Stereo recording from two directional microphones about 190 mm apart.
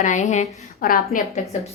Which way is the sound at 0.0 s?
40° left (ahead or behind).